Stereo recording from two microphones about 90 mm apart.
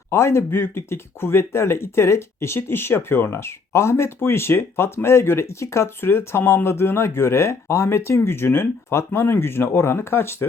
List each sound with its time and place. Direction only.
0.1 s speech: 30° left (ahead or behind)